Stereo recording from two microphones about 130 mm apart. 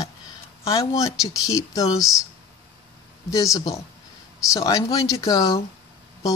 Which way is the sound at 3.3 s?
25° left (ahead or behind).